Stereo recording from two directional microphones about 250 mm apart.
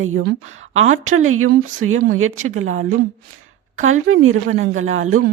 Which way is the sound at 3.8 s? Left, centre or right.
Right.